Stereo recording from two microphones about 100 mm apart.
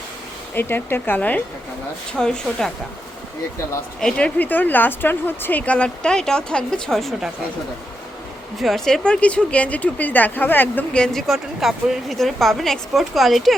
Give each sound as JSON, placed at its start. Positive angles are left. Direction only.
{"t": 0.5, "sound": "speech", "side_deg": 20}
{"t": 2.1, "sound": "speech", "side_deg": 5}
{"t": 4.0, "sound": "speech", "side_deg": 15}
{"t": 8.5, "sound": "speech", "side_deg": 0}
{"t": 10.9, "sound": "speech", "side_deg": 5}